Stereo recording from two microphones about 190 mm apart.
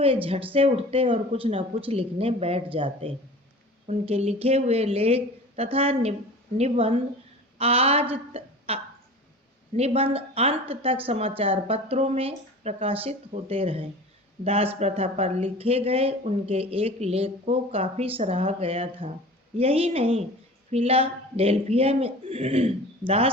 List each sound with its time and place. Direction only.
0.5 s speech: 30° right (ahead or behind)
8.1 s a sound: 30° right (ahead or behind)
9.7 s speech: 30° right (ahead or behind)